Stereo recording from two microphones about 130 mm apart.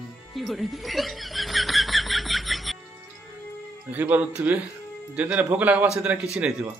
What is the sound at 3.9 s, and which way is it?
Speech, 15° right (ahead or behind).